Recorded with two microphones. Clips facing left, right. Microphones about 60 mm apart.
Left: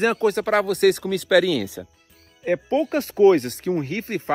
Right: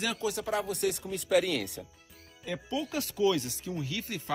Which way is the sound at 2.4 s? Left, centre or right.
Left.